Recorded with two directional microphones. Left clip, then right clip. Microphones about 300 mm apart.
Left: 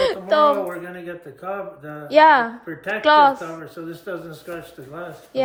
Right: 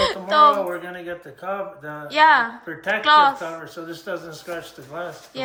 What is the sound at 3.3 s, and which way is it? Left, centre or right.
Speech, right.